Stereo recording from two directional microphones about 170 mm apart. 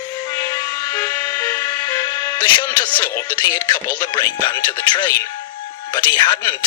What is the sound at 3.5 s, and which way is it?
A man's voice, 20° left (ahead or behind).